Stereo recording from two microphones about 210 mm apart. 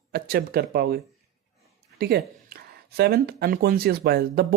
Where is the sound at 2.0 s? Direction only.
50° right (ahead or behind).